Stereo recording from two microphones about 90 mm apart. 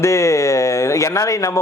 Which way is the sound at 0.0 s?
35° left (ahead or behind).